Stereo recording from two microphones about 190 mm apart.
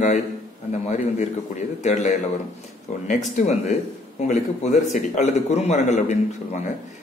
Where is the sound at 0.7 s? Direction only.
40° left (ahead or behind).